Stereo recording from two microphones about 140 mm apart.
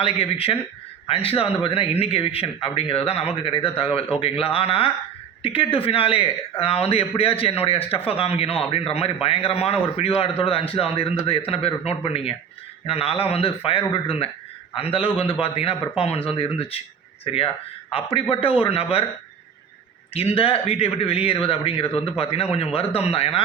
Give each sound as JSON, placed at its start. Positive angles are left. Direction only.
{"t": 0.0, "sound": "a man's voice", "side_deg": 45}
{"t": 20.1, "sound": "a man's voice", "side_deg": 45}